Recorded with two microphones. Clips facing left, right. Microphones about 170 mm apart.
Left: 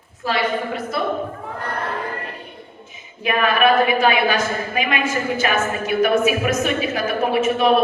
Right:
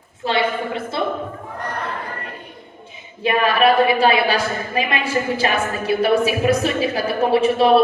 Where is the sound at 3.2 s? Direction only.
30° right (ahead or behind).